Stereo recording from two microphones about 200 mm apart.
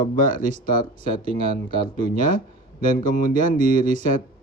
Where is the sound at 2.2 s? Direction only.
45° left (ahead or behind).